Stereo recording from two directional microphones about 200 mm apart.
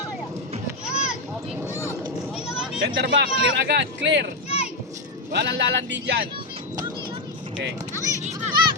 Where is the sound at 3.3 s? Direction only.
30° left (ahead or behind).